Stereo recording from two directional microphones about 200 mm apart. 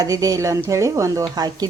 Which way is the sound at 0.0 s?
15° right (ahead or behind).